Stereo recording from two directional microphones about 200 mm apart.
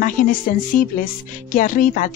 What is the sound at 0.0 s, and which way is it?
A woman's voice, 45° left (ahead or behind).